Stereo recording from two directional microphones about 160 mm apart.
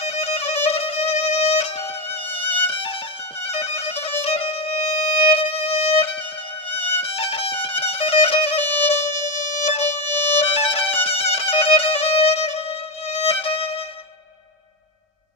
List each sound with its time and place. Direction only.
0.0 s music: 40° left (ahead or behind)
2.3 s violin: 35° left (ahead or behind)
3.4 s music: 40° left (ahead or behind)
8.6 s music: 15° left (ahead or behind)
8.9 s music: 45° left (ahead or behind)
10.1 s violin: 15° left (ahead or behind)
10.4 s music: 40° left (ahead or behind)